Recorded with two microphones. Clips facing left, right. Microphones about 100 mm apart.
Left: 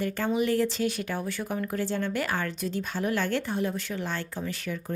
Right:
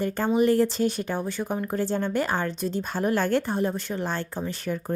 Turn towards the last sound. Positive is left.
turn(degrees=-35)  # may be behind; listen again after turning